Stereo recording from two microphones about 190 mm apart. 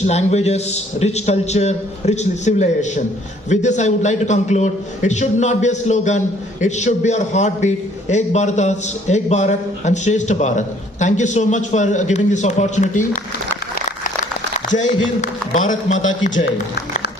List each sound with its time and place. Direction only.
0.0 s a man's voice: 35° left (ahead or behind)
14.8 s a man's voice: 40° left (ahead or behind)